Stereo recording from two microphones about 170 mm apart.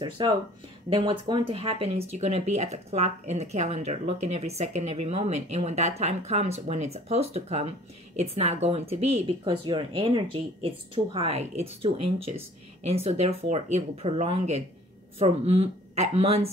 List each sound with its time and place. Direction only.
0.2 s speech: 30° right (ahead or behind)